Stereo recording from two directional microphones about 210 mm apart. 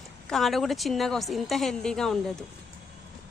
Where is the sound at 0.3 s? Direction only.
Centre (ahead or behind).